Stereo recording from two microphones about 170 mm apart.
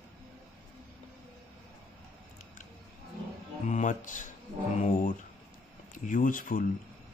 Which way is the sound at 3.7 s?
45° left (ahead or behind).